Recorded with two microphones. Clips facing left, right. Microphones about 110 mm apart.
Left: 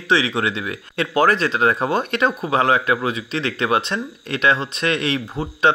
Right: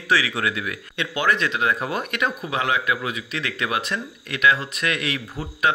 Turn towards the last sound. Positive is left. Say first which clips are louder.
# left 5 dB
turn(degrees=30)  # may be behind; listen again after turning